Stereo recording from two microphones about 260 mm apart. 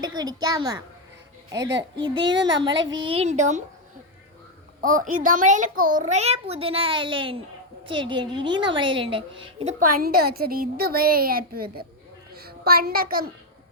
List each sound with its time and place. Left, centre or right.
0.2 s a child's voice: centre
4.8 s a child's voice: right